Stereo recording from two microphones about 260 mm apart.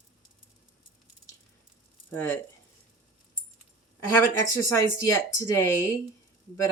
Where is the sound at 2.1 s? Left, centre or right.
Centre.